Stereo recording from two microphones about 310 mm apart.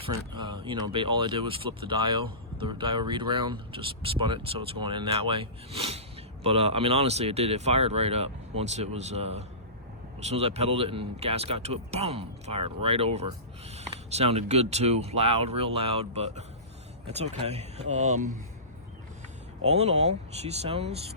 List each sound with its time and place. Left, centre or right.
0.0 s speech: centre
19.6 s speech: centre